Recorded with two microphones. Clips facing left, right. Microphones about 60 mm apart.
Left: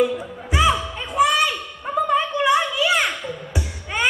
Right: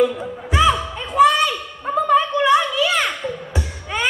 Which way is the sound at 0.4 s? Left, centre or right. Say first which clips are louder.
Right 2 dB; centre.